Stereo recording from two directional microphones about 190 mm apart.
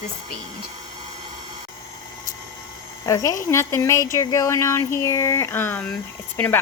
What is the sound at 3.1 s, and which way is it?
Speech, 20° left (ahead or behind).